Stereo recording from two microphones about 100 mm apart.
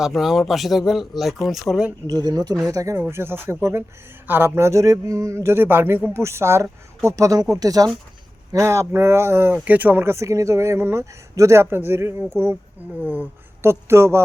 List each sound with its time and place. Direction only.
0.0 s speech: 5° right (ahead or behind)
2.0 s speech: 35° right (ahead or behind)